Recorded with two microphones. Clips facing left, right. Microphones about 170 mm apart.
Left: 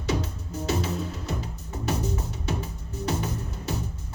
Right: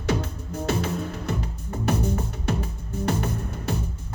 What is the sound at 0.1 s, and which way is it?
Music, 55° right (ahead or behind).